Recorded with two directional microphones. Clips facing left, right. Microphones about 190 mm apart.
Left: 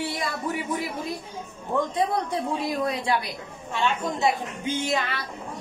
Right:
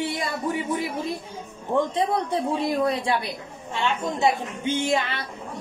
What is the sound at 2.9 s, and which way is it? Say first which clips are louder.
Music: right 2 dB; 30° right (ahead or behind).